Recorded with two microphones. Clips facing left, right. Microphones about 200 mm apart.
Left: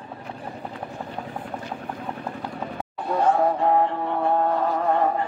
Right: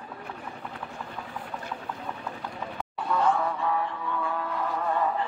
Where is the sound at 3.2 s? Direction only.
50° left (ahead or behind).